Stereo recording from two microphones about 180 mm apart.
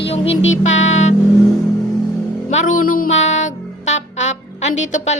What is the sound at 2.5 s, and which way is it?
Music, 40° left (ahead or behind).